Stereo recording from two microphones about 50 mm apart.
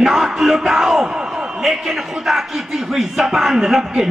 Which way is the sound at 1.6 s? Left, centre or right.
Centre.